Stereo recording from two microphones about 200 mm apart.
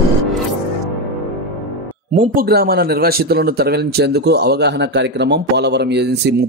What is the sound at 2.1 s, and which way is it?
Speech, 50° right (ahead or behind).